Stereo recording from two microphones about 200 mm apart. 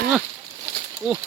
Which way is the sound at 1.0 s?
10° right (ahead or behind).